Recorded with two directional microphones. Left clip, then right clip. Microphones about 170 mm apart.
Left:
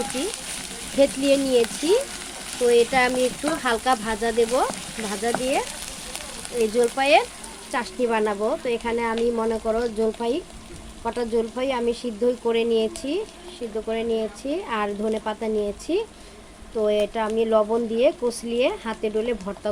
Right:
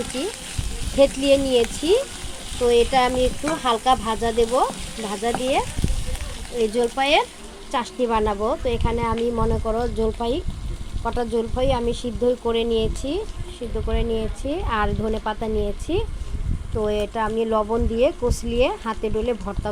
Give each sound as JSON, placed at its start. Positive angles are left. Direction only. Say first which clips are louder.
{"t": 0.9, "sound": "speech", "louder": "right 2 dB", "side_deg": 0}